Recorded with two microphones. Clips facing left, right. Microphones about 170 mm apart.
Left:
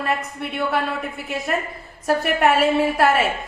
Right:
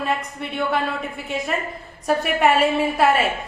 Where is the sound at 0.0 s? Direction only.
Centre (ahead or behind).